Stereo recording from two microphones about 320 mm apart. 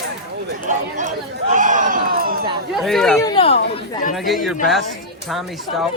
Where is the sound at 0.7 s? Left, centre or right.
Right.